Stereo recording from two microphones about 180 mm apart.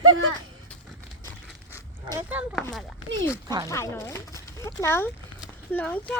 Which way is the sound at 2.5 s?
Centre (ahead or behind).